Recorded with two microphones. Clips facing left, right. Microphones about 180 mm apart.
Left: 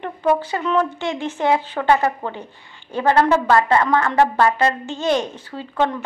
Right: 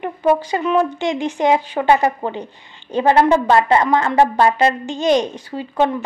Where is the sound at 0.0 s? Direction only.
10° right (ahead or behind).